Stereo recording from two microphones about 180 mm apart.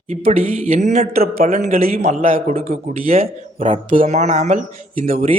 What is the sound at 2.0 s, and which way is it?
Speech, 40° right (ahead or behind).